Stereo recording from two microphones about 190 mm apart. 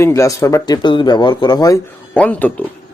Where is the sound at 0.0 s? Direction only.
15° left (ahead or behind).